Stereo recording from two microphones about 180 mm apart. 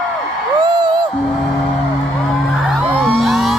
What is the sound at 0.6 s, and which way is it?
Music, 25° right (ahead or behind).